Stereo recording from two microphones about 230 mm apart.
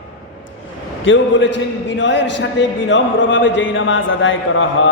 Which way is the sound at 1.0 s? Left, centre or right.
Left.